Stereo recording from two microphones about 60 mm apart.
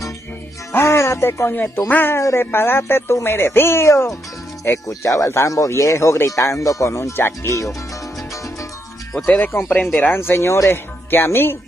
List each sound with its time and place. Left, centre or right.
0.7 s speech: left
1.9 s speech: left
2.1 s speech: left
4.7 s speech: left
5.0 s speech: left
9.5 s speech: left
11.1 s speech: left